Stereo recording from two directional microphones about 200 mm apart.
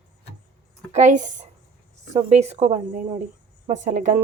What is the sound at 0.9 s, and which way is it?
Speech, 35° right (ahead or behind).